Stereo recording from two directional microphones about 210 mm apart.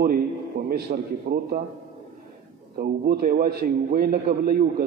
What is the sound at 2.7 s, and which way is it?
A man's voice, 45° right (ahead or behind).